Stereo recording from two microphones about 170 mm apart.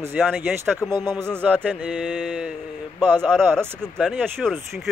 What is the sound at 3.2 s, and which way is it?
Speech, 5° left (ahead or behind).